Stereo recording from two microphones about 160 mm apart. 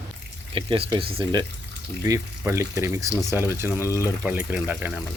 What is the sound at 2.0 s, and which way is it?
Speech, 20° right (ahead or behind).